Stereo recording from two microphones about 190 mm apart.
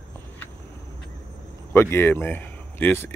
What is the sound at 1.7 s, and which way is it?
Speech, 10° left (ahead or behind).